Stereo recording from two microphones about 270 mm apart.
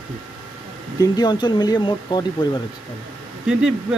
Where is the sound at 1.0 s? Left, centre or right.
Centre.